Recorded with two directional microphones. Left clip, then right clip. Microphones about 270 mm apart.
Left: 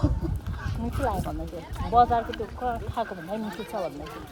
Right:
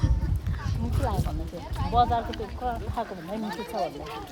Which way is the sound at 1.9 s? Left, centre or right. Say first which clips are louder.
Left 3 dB; left.